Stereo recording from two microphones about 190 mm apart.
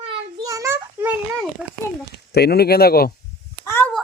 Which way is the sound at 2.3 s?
55° left (ahead or behind).